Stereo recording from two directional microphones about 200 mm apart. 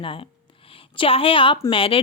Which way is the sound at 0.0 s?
25° left (ahead or behind).